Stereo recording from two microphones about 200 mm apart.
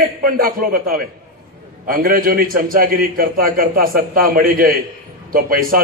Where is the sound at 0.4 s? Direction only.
45° right (ahead or behind).